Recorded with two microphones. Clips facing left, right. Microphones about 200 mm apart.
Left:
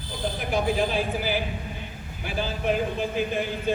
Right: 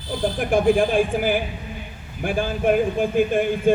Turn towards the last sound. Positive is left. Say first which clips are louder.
# right 8 dB
turn(degrees=-50)  # may be behind; listen again after turning